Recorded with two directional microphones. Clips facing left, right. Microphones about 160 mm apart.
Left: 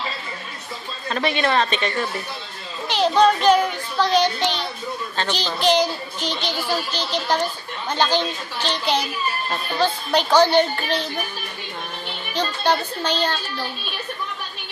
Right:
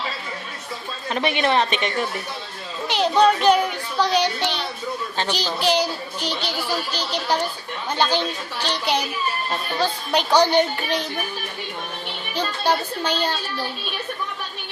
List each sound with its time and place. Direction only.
1.1 s a child's voice: 15° right (ahead or behind)
12.3 s a child's voice: 10° right (ahead or behind)